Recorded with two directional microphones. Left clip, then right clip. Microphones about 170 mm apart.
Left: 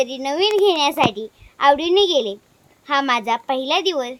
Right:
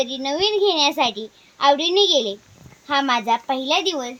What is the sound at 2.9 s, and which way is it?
Speech, 25° left (ahead or behind).